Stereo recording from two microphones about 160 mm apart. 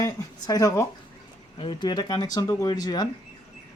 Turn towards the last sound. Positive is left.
turn(degrees=25)  # may be behind; listen again after turning